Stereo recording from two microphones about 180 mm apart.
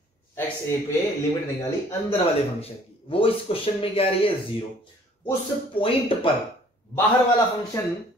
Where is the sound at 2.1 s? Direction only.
30° left (ahead or behind).